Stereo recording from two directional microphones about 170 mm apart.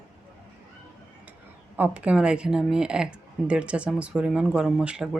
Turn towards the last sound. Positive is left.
turn(degrees=-5)  # may be behind; listen again after turning